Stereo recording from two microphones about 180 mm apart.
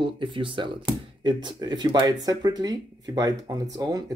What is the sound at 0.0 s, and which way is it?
Speech, 25° right (ahead or behind).